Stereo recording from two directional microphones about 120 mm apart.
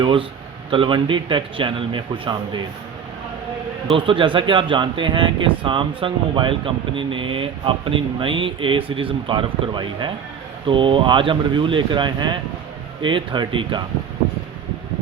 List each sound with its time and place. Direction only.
0.0 s speech: 40° right (ahead or behind)
3.9 s speech: 45° right (ahead or behind)